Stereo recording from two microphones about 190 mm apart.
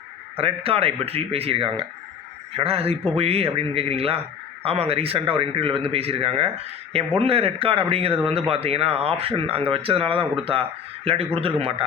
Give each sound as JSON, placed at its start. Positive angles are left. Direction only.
{"t": 0.3, "sound": "speech", "side_deg": -30}